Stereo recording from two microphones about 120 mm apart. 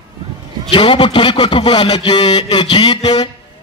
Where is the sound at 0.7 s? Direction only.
45° left (ahead or behind).